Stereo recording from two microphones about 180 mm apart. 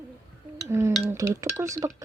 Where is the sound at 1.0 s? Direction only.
15° right (ahead or behind).